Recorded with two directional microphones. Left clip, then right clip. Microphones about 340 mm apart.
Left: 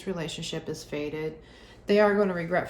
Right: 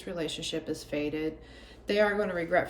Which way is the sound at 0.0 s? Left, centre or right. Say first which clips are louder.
Even; centre.